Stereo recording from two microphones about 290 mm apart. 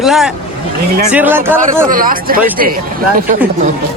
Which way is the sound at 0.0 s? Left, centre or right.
Centre.